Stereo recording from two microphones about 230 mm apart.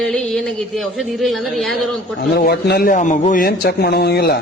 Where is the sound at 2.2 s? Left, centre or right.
Left.